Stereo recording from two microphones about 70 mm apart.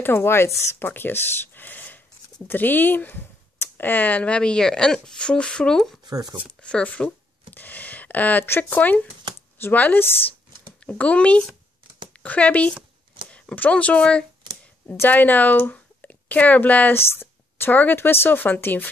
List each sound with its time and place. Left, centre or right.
0.0 s speech: left; by 5.8 s centre
6.0 s speech: right
6.6 s speech: centre
15.0 s speech: left
17.1 s speech: left